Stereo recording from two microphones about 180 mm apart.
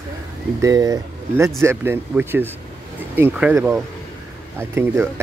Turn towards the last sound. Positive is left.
turn(degrees=-15)  # may be behind; listen again after turning